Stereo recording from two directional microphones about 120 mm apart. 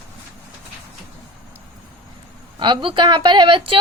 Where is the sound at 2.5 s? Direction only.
40° right (ahead or behind).